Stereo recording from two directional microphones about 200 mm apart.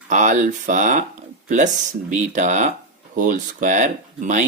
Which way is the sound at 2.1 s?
40° right (ahead or behind).